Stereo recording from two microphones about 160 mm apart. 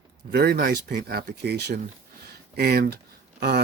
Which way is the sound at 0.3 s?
80° right.